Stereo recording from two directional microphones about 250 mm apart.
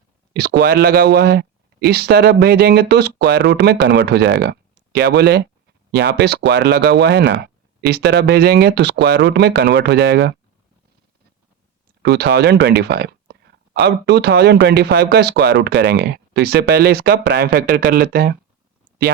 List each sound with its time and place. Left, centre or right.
0.6 s a man's voice: right
12.0 s a man's voice: right